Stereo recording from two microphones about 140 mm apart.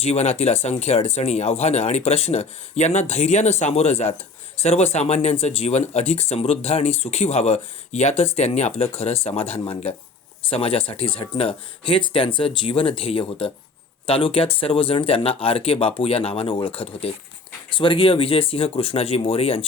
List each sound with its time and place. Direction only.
0.0 s speech: 50° left (ahead or behind)